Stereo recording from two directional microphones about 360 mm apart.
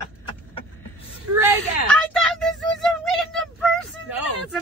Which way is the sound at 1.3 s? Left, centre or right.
Centre.